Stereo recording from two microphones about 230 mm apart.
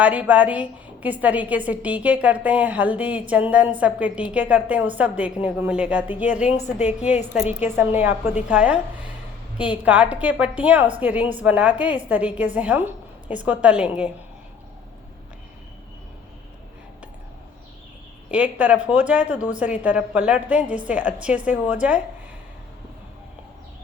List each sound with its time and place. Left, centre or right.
0.0 s a woman's voice: centre
6.6 s a woman's voice: left
7.3 s a woman's voice: centre
18.3 s a woman's voice: centre